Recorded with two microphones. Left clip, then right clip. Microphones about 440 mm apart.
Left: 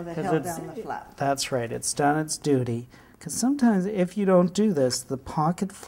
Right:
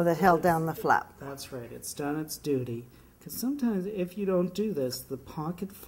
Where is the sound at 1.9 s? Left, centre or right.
Left.